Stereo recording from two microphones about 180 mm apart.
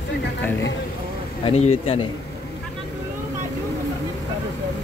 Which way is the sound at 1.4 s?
35° left (ahead or behind).